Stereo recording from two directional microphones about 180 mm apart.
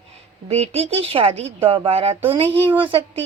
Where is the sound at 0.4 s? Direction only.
35° right (ahead or behind).